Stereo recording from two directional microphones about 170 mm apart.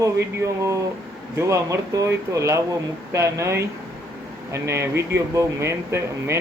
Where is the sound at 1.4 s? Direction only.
15° right (ahead or behind).